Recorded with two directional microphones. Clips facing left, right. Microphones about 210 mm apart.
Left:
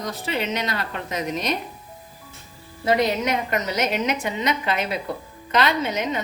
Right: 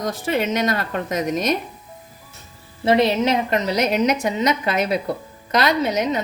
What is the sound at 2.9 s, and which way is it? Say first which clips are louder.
A woman's voice: right 4 dB; 25° right (ahead or behind).